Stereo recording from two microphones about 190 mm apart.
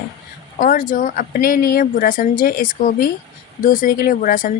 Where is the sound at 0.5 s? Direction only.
45° left (ahead or behind).